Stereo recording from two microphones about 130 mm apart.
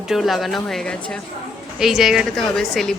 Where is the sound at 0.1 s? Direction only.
Centre (ahead or behind).